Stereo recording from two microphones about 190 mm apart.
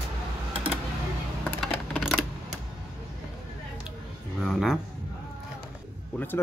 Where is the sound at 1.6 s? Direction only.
Centre (ahead or behind).